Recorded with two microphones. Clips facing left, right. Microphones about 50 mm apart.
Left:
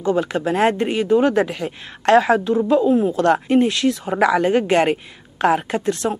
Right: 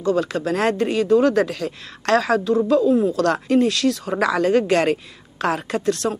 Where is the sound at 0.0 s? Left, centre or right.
Left.